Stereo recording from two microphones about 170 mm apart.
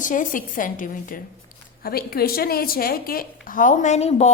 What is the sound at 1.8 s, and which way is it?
A woman's voice, 60° left (ahead or behind).